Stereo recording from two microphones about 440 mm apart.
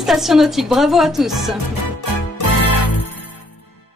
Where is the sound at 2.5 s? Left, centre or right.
Left.